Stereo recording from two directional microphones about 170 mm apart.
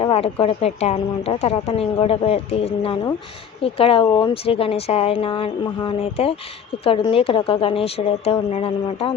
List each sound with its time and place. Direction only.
0.0 s a woman's voice: 35° left (ahead or behind)